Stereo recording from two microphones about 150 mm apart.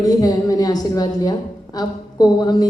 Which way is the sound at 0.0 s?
25° left (ahead or behind).